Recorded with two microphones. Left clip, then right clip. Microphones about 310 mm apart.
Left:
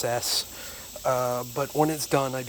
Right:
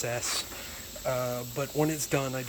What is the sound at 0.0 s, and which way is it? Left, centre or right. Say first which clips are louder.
Speech: left 5 dB; centre.